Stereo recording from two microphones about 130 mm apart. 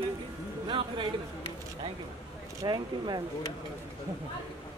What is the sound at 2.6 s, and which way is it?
Speech, 35° right (ahead or behind).